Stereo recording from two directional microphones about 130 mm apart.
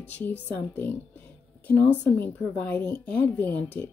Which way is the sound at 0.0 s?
10° left (ahead or behind).